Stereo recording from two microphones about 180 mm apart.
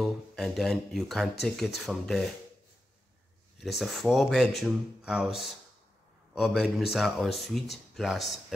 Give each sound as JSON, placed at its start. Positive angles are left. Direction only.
{"t": 0.0, "sound": "speech", "side_deg": 0}
{"t": 3.5, "sound": "speech", "side_deg": 0}